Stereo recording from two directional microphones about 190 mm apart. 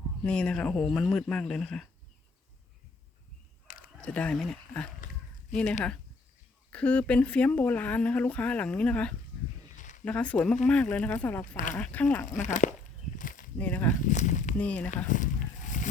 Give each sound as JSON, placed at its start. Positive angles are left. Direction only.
{"t": 0.3, "sound": "speech", "side_deg": 5}
{"t": 3.7, "sound": "fowl", "side_deg": 45}
{"t": 4.0, "sound": "speech", "side_deg": 5}
{"t": 6.7, "sound": "speech", "side_deg": 5}
{"t": 9.7, "sound": "a sound", "side_deg": 40}
{"t": 10.0, "sound": "speech", "side_deg": 5}
{"t": 11.5, "sound": "speech", "side_deg": 40}
{"t": 11.8, "sound": "speech", "side_deg": 5}
{"t": 12.2, "sound": "speech", "side_deg": 40}
{"t": 13.1, "sound": "a sound", "side_deg": 45}
{"t": 13.6, "sound": "speech", "side_deg": 10}
{"t": 14.0, "sound": "speech", "side_deg": 40}
{"t": 14.6, "sound": "speech", "side_deg": 5}
{"t": 15.1, "sound": "a sound", "side_deg": 40}